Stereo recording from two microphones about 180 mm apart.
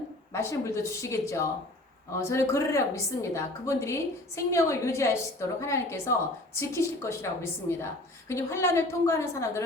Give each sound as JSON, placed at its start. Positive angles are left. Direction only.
{"t": 0.3, "sound": "a woman's voice", "side_deg": 15}